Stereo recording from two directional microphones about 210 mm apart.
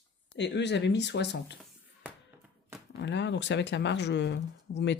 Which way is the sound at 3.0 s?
55° left (ahead or behind).